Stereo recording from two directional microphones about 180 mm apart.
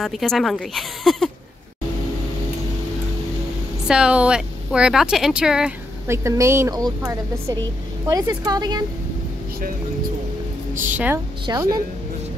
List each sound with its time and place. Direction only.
0.0 s speech: centre (ahead or behind)
3.8 s a woman's voice: 5° right (ahead or behind); by 8.8 s 20° right (ahead or behind)
10.7 s a woman's voice: 10° right (ahead or behind)
11.5 s a woman's voice: 20° right (ahead or behind)